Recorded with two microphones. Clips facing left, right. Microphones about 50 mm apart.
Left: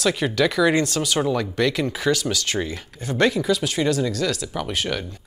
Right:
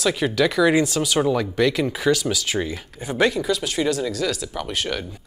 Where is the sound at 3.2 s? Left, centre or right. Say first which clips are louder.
Left 1 dB; centre.